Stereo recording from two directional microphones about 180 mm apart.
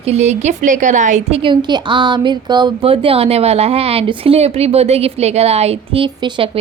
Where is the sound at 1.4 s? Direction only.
25° right (ahead or behind).